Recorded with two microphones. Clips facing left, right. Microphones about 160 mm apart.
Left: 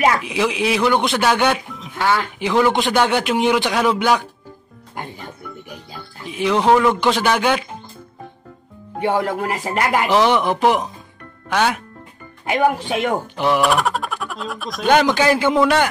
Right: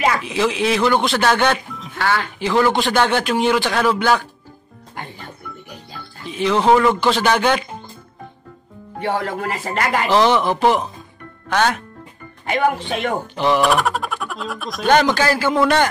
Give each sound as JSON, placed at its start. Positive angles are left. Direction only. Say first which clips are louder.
{"t": 0.2, "sound": "speech", "louder": "right 1 dB", "side_deg": 10}
{"t": 6.2, "sound": "speech", "louder": "even", "side_deg": 10}
{"t": 7.0, "sound": "speech", "louder": "right 1 dB", "side_deg": 15}
{"t": 9.0, "sound": "speech", "louder": "left 3 dB", "side_deg": 10}
{"t": 12.8, "sound": "speech", "louder": "left 2 dB", "side_deg": 5}
{"t": 15.2, "sound": "a man's voice", "louder": "left 2 dB", "side_deg": 20}
{"t": 15.5, "sound": "speech", "louder": "even", "side_deg": 5}